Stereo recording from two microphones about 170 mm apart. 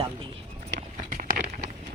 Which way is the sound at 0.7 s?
50° right (ahead or behind).